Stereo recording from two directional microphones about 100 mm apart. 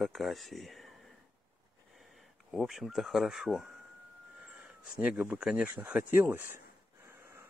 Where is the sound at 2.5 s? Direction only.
Centre (ahead or behind).